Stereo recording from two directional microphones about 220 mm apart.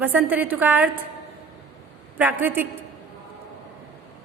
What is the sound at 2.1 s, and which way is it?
Speech, 10° right (ahead or behind).